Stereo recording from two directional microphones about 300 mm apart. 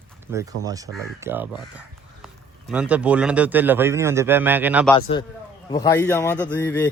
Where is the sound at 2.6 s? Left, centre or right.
Centre.